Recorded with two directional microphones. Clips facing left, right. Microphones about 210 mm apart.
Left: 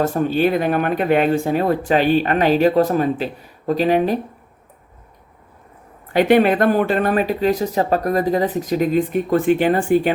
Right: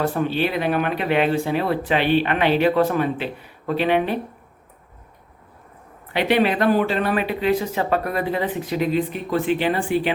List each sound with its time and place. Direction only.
0.0 s speech: 45° left (ahead or behind)
6.1 s speech: 50° left (ahead or behind)